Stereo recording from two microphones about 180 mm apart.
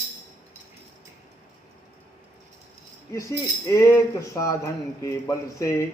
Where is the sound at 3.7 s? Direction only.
15° left (ahead or behind).